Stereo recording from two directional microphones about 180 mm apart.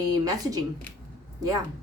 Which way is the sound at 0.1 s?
20° right (ahead or behind).